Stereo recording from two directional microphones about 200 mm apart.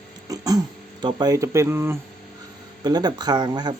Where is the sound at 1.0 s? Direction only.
20° right (ahead or behind).